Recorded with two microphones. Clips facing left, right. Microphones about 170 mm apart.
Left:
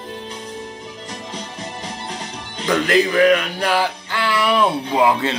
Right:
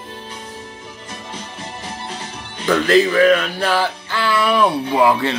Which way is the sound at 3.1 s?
15° left (ahead or behind).